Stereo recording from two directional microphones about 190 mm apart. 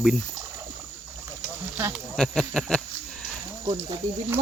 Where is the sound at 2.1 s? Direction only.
5° left (ahead or behind).